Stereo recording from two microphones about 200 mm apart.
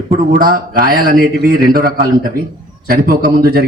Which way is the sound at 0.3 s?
45° right (ahead or behind).